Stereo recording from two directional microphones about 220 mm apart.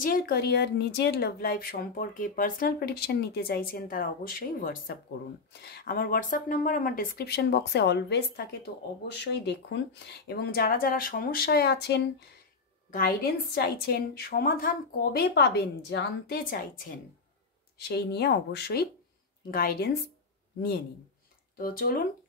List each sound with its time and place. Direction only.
0.0 s speech: 40° left (ahead or behind)
21.5 s speech: 40° left (ahead or behind)